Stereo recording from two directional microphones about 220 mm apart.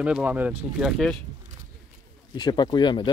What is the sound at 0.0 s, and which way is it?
Speech, 5° right (ahead or behind).